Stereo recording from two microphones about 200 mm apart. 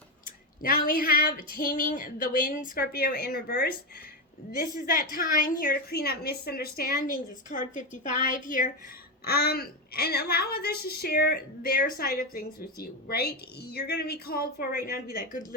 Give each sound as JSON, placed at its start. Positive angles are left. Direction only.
{"t": 0.6, "sound": "a woman's voice", "side_deg": 45}